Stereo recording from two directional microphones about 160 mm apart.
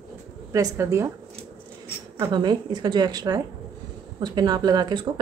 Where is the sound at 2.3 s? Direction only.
25° right (ahead or behind).